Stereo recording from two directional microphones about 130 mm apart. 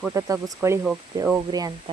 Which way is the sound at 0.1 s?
25° right (ahead or behind).